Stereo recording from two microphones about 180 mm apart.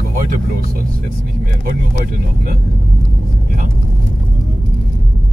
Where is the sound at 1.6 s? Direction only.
55° right (ahead or behind).